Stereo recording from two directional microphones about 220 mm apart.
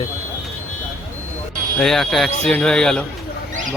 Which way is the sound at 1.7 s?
Centre (ahead or behind).